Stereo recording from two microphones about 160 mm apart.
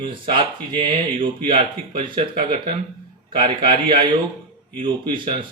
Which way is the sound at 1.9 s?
30° right (ahead or behind).